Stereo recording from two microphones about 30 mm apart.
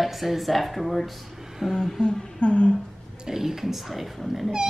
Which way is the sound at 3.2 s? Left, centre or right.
Centre.